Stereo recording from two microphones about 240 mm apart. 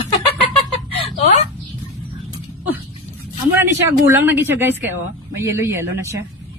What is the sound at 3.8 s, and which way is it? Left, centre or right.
Speech, centre.